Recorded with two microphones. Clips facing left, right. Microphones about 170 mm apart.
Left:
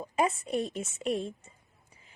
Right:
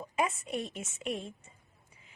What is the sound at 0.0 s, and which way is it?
A woman's voice, 35° left (ahead or behind).